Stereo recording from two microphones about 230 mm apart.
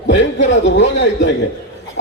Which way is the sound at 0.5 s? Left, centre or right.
Left.